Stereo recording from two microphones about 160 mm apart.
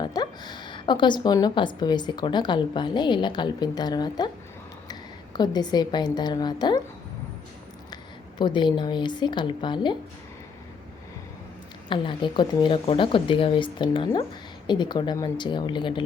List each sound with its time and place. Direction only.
0.0 s a woman's voice: 25° left (ahead or behind)
8.4 s a woman's voice: 30° left (ahead or behind)
11.9 s a woman's voice: 30° left (ahead or behind)